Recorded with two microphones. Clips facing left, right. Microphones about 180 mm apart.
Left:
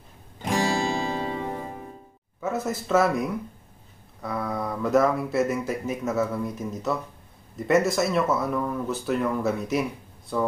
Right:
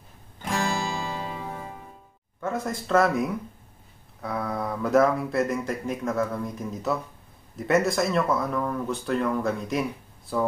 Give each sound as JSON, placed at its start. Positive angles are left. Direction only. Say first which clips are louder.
{"t": 0.4, "sound": "music", "louder": "left 3 dB", "side_deg": 20}
{"t": 2.4, "sound": "speech", "louder": "left 1 dB", "side_deg": 5}